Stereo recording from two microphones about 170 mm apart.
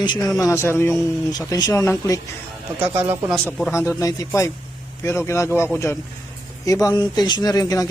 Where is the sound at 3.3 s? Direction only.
5° left (ahead or behind).